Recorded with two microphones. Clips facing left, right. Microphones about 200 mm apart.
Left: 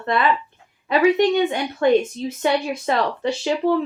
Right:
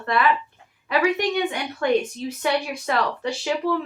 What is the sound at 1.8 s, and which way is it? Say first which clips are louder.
Speech: left 4 dB; 25° left (ahead or behind).